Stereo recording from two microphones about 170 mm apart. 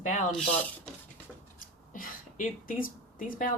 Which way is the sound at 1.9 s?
55° left (ahead or behind).